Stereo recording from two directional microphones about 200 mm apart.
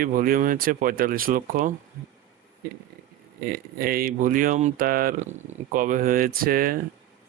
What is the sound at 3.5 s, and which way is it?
Speech, 50° right (ahead or behind).